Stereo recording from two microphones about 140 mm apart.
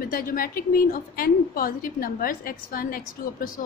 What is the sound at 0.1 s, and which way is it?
A woman's voice, 90° left.